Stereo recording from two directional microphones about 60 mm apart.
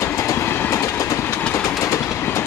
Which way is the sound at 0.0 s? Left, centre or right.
Left.